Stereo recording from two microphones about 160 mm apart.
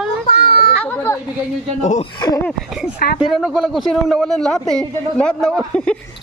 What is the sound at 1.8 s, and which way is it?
Speech, 50° left (ahead or behind).